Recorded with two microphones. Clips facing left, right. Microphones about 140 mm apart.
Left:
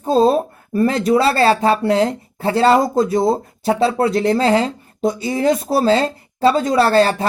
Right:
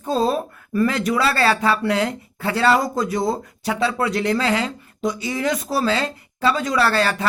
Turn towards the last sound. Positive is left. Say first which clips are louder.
# left 6 dB
turn(degrees=35)  # may be behind; listen again after turning